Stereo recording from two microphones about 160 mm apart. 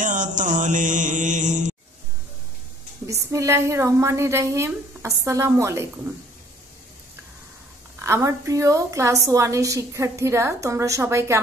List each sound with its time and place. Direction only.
0.0 s mantra: 50° right (ahead or behind)
3.1 s a woman's voice: 20° right (ahead or behind)
8.0 s a woman's voice: 20° right (ahead or behind)